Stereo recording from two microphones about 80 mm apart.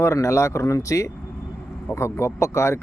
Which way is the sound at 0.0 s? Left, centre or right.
Left.